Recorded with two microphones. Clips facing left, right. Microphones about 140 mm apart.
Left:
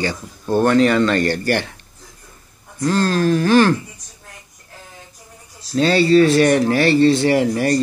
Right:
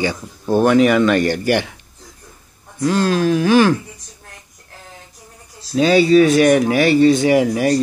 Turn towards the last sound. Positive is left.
turn(degrees=-5)  # may be behind; listen again after turning